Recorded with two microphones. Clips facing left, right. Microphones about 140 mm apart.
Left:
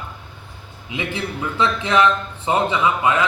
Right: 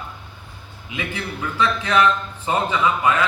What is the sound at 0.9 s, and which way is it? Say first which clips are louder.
A man's voice: left 3 dB; 25° left (ahead or behind).